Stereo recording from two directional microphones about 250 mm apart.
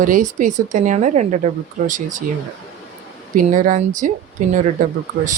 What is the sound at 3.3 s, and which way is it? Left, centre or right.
Speech, right.